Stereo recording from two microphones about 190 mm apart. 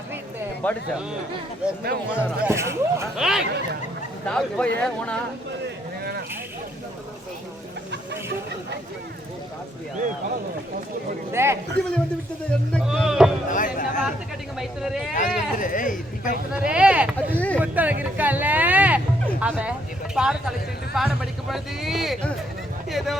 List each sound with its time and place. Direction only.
0.6 s speech: 5° left (ahead or behind)
2.1 s speech: 10° right (ahead or behind)
3.2 s speech: 5° right (ahead or behind)
11.3 s speech: 15° right (ahead or behind)
11.8 s speech: 5° left (ahead or behind)
13.5 s speech: 45° left (ahead or behind)
14.6 s speech: centre (ahead or behind)
15.1 s speech: 45° left (ahead or behind)
16.6 s speech: 5° right (ahead or behind)
17.2 s speech: 5° left (ahead or behind)
17.6 s speech: 10° right (ahead or behind)